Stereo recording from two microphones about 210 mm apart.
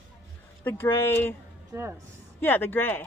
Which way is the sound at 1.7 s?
10° right (ahead or behind).